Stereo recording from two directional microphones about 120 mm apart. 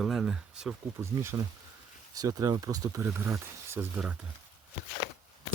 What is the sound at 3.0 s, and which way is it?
Speech, 20° right (ahead or behind).